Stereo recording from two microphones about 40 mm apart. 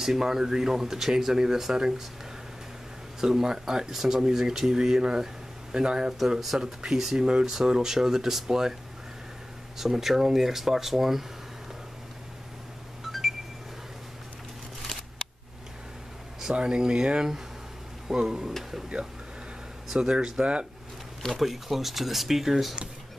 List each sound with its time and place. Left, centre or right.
0.0 s speech: centre
3.2 s speech: centre
9.8 s speech: centre
14.8 s a sound: centre
16.5 s speech: centre
19.9 s speech: centre
21.4 s speech: centre